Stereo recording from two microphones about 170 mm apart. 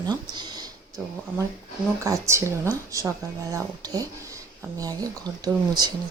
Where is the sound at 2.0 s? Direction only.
15° right (ahead or behind).